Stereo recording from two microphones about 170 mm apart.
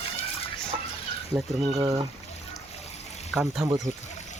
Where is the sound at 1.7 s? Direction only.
20° right (ahead or behind).